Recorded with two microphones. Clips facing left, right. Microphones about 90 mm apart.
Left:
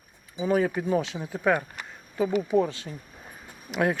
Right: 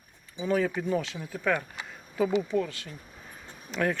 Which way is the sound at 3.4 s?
15° left (ahead or behind).